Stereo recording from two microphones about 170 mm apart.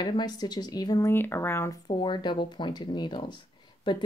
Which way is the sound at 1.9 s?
25° left (ahead or behind).